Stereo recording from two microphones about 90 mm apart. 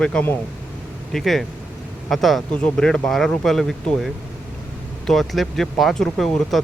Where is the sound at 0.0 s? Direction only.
10° left (ahead or behind).